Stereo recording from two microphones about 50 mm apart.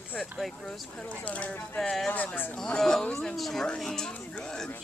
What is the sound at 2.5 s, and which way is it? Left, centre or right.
Speech, centre.